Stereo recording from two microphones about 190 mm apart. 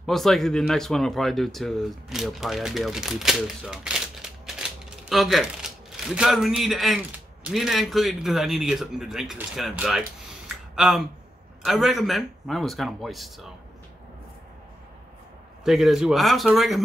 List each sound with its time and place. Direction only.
0.0 s a man's voice: centre (ahead or behind)
15.6 s a man's voice: centre (ahead or behind)